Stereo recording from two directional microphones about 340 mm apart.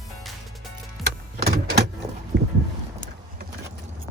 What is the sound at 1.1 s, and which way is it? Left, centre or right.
Vehicle, right.